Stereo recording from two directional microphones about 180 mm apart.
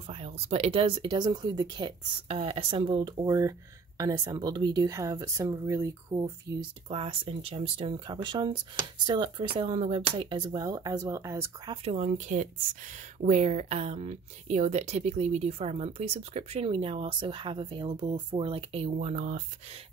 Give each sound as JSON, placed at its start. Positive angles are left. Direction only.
{"t": 0.0, "sound": "speech", "side_deg": -35}
{"t": 6.9, "sound": "speech", "side_deg": -30}
{"t": 11.7, "sound": "speech", "side_deg": -35}